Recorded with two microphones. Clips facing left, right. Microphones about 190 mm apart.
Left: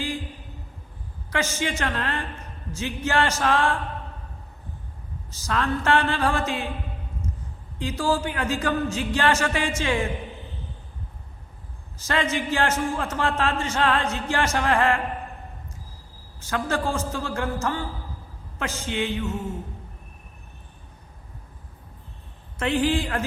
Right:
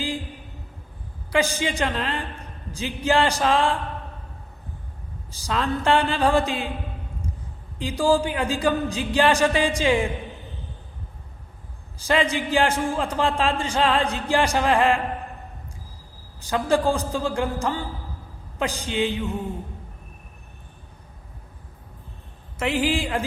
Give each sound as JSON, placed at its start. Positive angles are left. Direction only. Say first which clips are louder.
{"t": 1.3, "sound": "speech", "louder": "right 4 dB", "side_deg": -15}
{"t": 5.3, "sound": "speech", "louder": "even", "side_deg": -15}
{"t": 7.8, "sound": "speech", "louder": "right 4 dB", "side_deg": -15}
{"t": 11.9, "sound": "speech", "louder": "right 3 dB", "side_deg": -15}
{"t": 16.4, "sound": "speech", "louder": "right 5 dB", "side_deg": -15}
{"t": 22.8, "sound": "speech", "louder": "even", "side_deg": -10}